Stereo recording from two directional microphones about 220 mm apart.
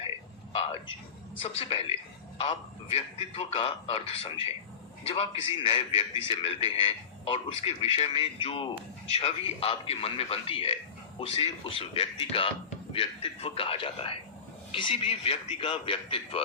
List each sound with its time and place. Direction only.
1.4 s speech: 25° left (ahead or behind)